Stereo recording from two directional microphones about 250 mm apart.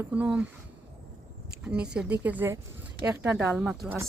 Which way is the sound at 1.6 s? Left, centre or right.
Centre.